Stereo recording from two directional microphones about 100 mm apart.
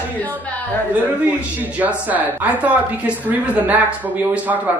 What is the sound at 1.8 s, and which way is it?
A woman's voice, 15° right (ahead or behind).